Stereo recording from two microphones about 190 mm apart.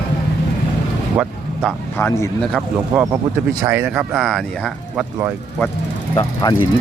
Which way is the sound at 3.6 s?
10° right (ahead or behind).